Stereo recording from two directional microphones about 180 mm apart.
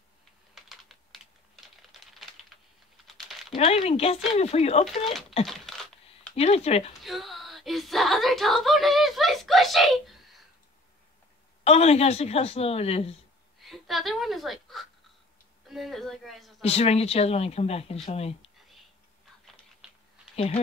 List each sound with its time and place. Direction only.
0.6 s typing: centre (ahead or behind)
3.5 s speech: 40° left (ahead or behind)
5.5 s a sound: centre (ahead or behind)
6.3 s speech: 35° left (ahead or behind)
7.0 s speech: centre (ahead or behind)
11.6 s speech: 35° left (ahead or behind)
13.6 s a sound: centre (ahead or behind)
15.7 s a woman's voice: centre (ahead or behind)
16.6 s speech: 35° left (ahead or behind)